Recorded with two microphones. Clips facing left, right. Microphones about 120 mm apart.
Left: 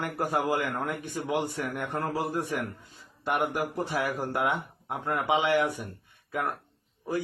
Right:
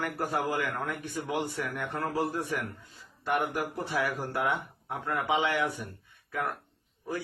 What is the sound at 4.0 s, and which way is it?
Speech, 15° left (ahead or behind).